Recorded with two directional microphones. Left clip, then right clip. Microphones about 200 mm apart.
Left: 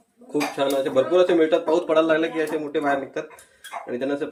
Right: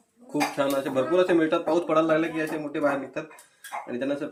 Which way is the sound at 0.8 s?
20° right (ahead or behind).